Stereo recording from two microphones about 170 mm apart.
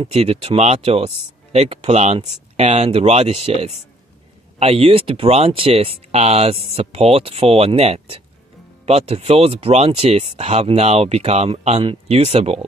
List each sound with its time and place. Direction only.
0.0 s speech: 35° right (ahead or behind)